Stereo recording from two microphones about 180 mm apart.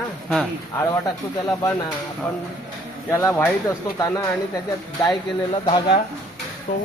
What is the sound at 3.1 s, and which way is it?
Speech, 15° left (ahead or behind).